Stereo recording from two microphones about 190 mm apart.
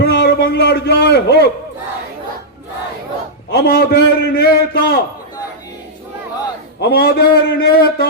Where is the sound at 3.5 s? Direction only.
55° left (ahead or behind).